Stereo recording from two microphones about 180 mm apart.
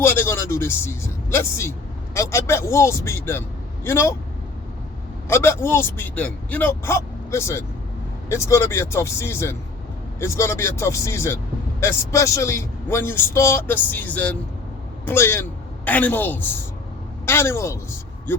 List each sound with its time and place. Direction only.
0.0 s a man's voice: 10° left (ahead or behind)
5.3 s a man's voice: 15° left (ahead or behind)